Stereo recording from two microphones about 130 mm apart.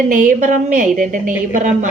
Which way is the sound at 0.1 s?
90° right.